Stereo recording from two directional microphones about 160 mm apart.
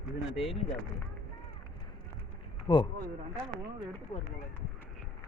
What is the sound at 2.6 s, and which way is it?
Speech, 30° left (ahead or behind).